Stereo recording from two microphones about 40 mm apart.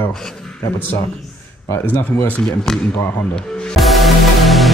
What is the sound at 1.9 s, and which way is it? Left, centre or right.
Speech, left.